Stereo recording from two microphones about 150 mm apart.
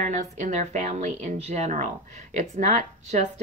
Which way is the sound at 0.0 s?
55° right (ahead or behind).